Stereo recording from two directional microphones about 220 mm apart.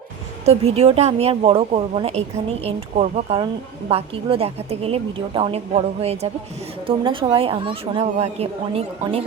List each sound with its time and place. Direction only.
0.4 s a woman's voice: 30° right (ahead or behind)